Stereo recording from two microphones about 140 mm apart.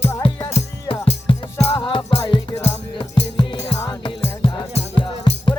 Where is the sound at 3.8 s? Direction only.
25° left (ahead or behind).